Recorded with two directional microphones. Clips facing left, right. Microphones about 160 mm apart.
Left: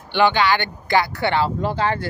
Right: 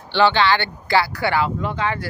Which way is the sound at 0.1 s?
15° left (ahead or behind).